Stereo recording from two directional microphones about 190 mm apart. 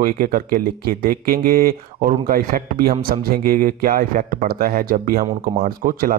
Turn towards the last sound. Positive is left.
turn(degrees=-45)  # may be behind; listen again after turning